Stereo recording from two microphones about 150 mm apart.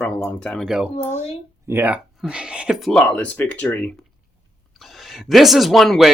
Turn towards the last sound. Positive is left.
turn(degrees=0)  # may be behind; listen again after turning